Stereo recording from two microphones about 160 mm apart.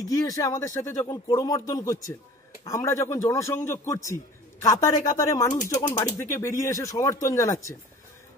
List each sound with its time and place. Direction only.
0.1 s a man's voice: 20° left (ahead or behind)